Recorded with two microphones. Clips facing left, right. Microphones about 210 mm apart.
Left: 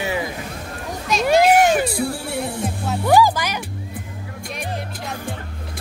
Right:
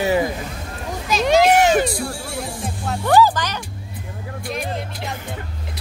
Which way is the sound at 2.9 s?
10° left (ahead or behind).